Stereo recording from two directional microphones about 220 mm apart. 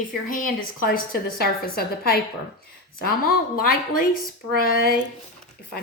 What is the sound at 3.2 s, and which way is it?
Speech, 45° left (ahead or behind).